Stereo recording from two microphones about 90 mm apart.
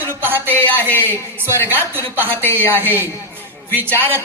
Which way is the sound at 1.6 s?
25° right (ahead or behind).